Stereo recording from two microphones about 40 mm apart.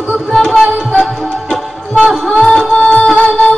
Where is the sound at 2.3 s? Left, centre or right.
Centre.